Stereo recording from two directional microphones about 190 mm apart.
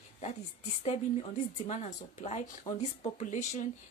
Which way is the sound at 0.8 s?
35° left (ahead or behind).